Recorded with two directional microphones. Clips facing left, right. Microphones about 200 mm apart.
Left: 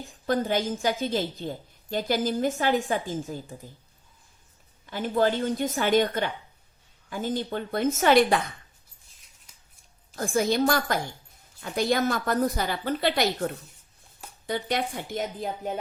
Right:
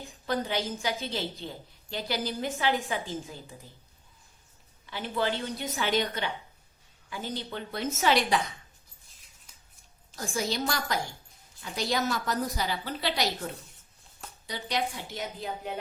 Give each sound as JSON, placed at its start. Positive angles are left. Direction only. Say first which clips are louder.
{"t": 0.3, "sound": "a woman's voice", "louder": "left 5 dB", "side_deg": 50}
{"t": 4.9, "sound": "a woman's voice", "louder": "left 6 dB", "side_deg": 45}
{"t": 10.2, "sound": "a woman's voice", "louder": "left 7 dB", "side_deg": 55}
{"t": 14.4, "sound": "a woman's voice", "louder": "left 4 dB", "side_deg": 55}